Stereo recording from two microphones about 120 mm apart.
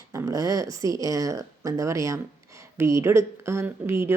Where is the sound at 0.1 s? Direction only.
25° right (ahead or behind).